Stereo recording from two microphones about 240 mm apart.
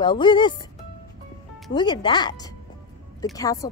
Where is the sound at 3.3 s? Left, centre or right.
Centre.